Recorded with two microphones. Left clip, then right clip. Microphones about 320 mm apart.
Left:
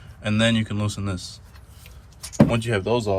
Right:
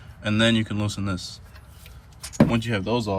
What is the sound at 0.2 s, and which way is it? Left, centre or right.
A man's voice, centre.